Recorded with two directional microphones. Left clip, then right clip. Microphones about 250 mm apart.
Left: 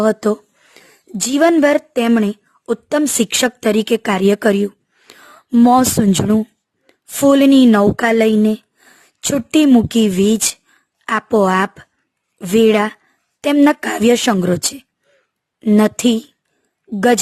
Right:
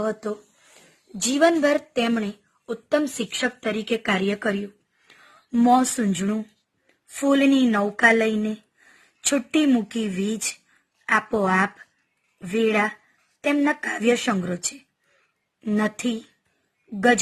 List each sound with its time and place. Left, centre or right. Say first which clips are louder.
0.0 s a woman's voice: left 12 dB; left
5.5 s a woman's voice: left 7 dB; left
6.8 s a woman's voice: left 10 dB; left
15.6 s a woman's voice: left 11 dB; left